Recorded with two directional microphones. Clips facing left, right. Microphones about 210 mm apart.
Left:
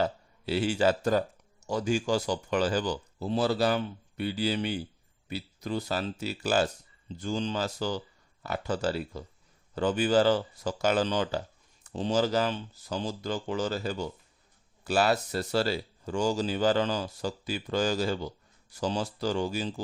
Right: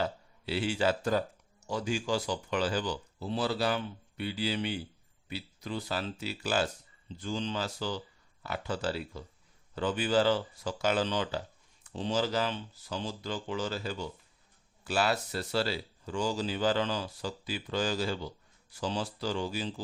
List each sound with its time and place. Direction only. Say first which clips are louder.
0.0 s speech: left 4 dB; 40° left (ahead or behind)